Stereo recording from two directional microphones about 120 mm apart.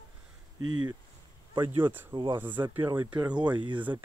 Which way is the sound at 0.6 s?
35° right (ahead or behind).